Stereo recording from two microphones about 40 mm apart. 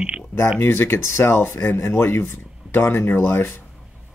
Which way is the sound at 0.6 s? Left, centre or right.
Left.